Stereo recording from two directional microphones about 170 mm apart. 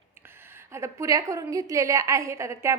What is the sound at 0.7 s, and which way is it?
A woman's voice, 15° right (ahead or behind).